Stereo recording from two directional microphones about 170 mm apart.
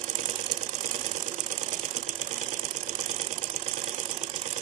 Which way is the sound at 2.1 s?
45° right (ahead or behind).